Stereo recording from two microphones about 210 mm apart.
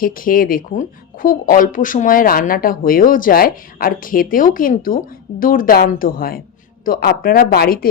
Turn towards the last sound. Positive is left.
turn(degrees=45)  # may be behind; listen again after turning